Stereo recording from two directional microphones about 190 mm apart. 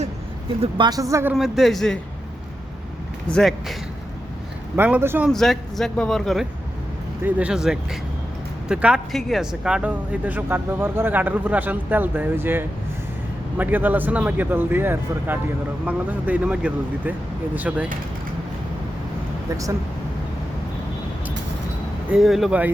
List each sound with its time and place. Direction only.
0.6 s speech: 20° right (ahead or behind); by 2.0 s centre (ahead or behind)
3.2 s speech: 5° left (ahead or behind)
4.8 s speech: 10° right (ahead or behind)
5.3 s speech: centre (ahead or behind)
22.1 s speech: centre (ahead or behind)